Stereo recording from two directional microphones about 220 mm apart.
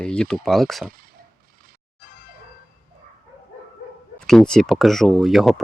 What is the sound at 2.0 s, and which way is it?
Music, 40° left (ahead or behind).